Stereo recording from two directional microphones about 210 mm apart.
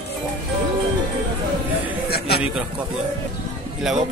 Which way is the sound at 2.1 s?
50° left (ahead or behind).